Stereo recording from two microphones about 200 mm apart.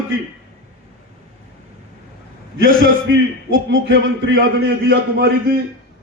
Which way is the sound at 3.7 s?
70° right (ahead or behind).